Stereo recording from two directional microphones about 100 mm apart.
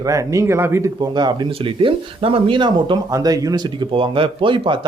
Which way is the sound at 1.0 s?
45° right (ahead or behind).